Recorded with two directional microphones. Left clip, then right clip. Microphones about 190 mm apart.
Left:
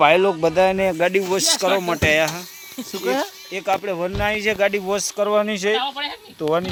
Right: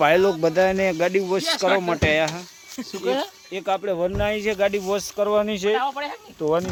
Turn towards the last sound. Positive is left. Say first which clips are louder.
# left 1 dB
turn(degrees=5)  # may be behind; listen again after turning